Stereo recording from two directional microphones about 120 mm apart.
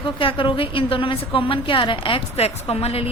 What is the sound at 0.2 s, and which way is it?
A woman's voice, 45° left (ahead or behind).